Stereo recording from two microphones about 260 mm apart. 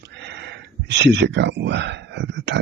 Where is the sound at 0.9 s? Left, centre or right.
Right.